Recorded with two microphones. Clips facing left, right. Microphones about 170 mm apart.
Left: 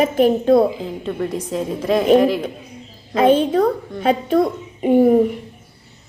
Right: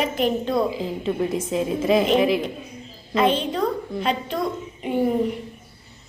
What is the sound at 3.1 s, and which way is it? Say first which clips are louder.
A woman's voice: left 7 dB; 50° left (ahead or behind).